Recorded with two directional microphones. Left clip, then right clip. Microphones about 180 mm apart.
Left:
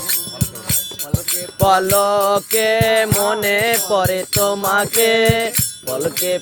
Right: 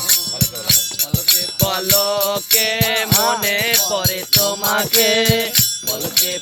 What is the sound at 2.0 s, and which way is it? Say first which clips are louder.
Music: left 4 dB; 45° left (ahead or behind).